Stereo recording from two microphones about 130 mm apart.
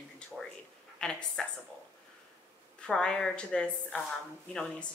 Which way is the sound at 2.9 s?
5° left (ahead or behind).